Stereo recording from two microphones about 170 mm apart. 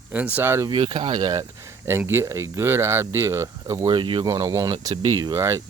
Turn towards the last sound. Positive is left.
turn(degrees=-15)  # may be behind; listen again after turning